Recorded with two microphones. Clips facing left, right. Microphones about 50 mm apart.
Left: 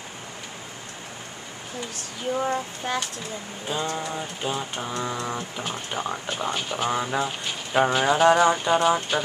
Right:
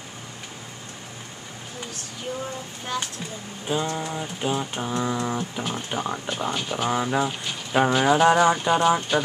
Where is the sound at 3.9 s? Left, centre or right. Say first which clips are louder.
Right 1 dB; centre.